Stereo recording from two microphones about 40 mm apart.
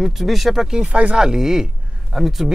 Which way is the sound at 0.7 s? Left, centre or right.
Centre.